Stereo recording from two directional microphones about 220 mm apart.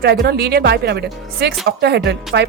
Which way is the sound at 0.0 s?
45° right (ahead or behind).